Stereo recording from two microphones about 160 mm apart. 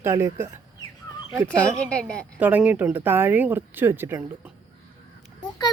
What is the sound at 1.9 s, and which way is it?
Speech, 5° left (ahead or behind).